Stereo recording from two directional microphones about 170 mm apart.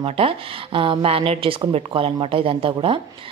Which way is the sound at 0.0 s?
35° right (ahead or behind).